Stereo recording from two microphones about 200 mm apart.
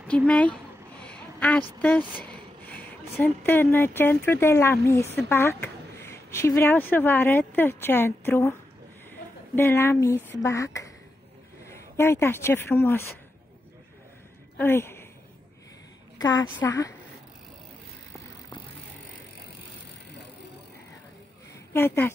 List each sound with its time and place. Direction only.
0.3 s speech: 5° left (ahead or behind)
1.0 s a sound: 5° left (ahead or behind)
1.8 s speech: 10° left (ahead or behind)
9.6 s speech: 10° left (ahead or behind)
14.6 s a woman's voice: 10° left (ahead or behind)
16.2 s a woman's voice: 20° left (ahead or behind)
21.7 s speech: 10° left (ahead or behind)